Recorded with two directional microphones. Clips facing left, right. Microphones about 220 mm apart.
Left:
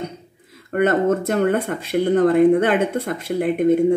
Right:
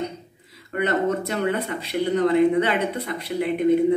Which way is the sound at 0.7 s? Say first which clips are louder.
Left 5 dB; 50° left (ahead or behind).